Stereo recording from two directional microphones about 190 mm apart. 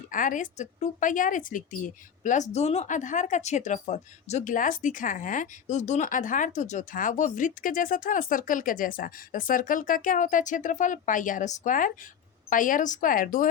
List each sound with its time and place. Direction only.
0.1 s a woman's voice: 45° left (ahead or behind)